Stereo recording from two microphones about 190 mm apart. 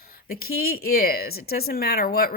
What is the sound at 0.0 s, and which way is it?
A woman's voice, 50° left (ahead or behind).